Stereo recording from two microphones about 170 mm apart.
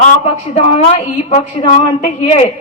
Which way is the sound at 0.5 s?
35° left (ahead or behind).